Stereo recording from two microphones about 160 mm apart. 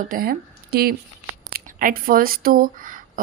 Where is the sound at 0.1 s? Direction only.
70° right (ahead or behind).